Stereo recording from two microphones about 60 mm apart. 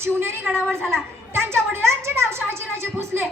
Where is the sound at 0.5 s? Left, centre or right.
Centre.